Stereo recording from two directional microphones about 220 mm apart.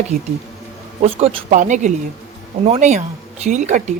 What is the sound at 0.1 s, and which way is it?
Speech, 30° right (ahead or behind).